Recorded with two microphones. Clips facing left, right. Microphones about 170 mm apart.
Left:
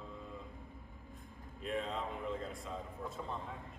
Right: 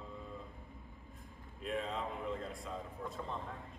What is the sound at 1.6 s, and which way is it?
Speech, centre (ahead or behind).